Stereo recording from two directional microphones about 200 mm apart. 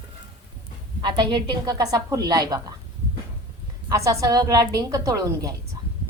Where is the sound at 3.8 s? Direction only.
15° right (ahead or behind).